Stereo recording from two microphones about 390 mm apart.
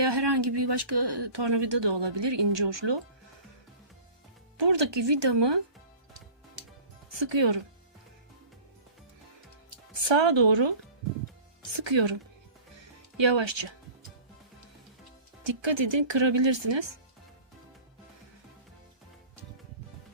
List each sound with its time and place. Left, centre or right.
0.0 s speech: right
4.5 s speech: right
7.1 s speech: right
9.9 s speech: right
11.8 s speech: right
13.1 s speech: right
15.4 s speech: right